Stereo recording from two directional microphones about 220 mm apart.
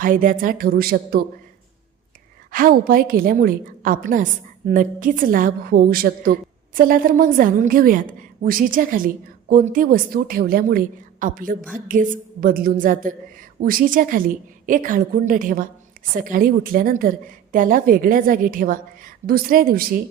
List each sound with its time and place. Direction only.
0.0 s a woman's voice: 40° right (ahead or behind)
2.5 s a woman's voice: 40° right (ahead or behind)